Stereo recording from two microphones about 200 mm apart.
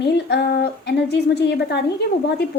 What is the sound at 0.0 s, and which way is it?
A woman's voice, 55° left (ahead or behind).